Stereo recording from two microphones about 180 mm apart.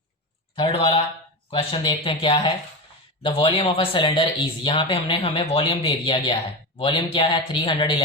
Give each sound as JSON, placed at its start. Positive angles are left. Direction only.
{"t": 0.5, "sound": "speech", "side_deg": 30}